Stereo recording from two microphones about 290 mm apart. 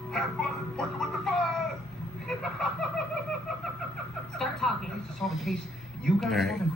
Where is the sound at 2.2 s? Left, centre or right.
Centre.